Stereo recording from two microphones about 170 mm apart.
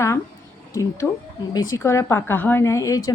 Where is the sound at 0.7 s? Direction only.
20° left (ahead or behind).